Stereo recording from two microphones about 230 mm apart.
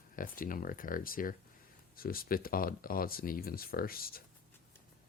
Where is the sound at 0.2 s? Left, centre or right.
Left.